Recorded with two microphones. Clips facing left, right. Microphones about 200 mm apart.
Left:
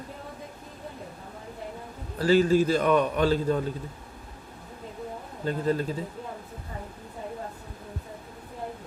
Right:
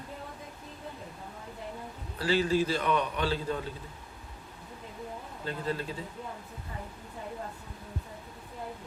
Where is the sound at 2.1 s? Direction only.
45° left (ahead or behind).